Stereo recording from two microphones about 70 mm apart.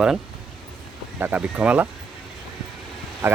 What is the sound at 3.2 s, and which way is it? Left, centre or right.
Speech, right.